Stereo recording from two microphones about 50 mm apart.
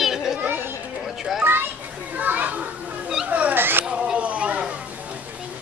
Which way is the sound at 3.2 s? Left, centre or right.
Right.